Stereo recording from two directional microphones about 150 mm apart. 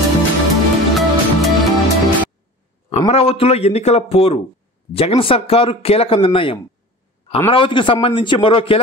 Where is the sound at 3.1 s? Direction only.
40° left (ahead or behind).